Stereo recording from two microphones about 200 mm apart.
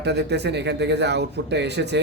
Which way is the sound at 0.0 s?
55° right (ahead or behind).